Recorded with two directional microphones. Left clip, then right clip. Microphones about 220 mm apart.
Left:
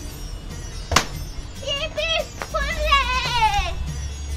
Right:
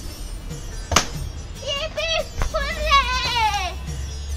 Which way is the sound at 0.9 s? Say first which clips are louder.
Even; 5° left (ahead or behind).